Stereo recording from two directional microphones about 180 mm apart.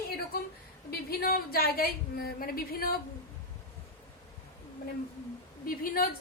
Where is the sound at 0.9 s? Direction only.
55° left (ahead or behind).